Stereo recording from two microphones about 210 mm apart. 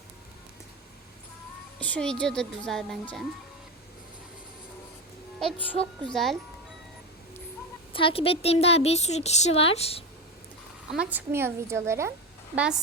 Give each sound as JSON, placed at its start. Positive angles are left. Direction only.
{"t": 1.8, "sound": "a woman's voice", "side_deg": 5}
{"t": 6.1, "sound": "a woman's voice", "side_deg": 0}
{"t": 7.9, "sound": "a woman's voice", "side_deg": 25}
{"t": 10.9, "sound": "a woman's voice", "side_deg": -5}